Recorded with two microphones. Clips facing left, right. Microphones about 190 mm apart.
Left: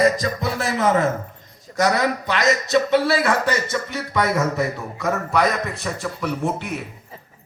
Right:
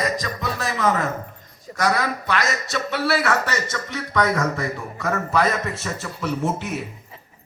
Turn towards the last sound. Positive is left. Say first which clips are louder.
# even
turn(degrees=0)  # may be behind; listen again after turning